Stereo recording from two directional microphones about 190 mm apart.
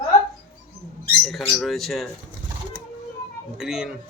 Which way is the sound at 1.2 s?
Centre (ahead or behind).